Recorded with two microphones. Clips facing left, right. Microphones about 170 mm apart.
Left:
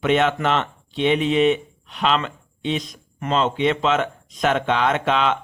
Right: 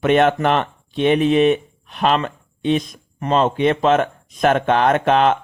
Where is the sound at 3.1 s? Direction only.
40° right (ahead or behind).